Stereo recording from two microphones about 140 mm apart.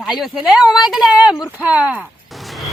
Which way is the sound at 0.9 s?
5° right (ahead or behind).